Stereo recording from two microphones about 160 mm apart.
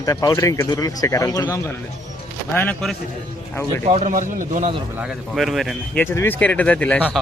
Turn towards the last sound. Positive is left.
turn(degrees=10)  # may be behind; listen again after turning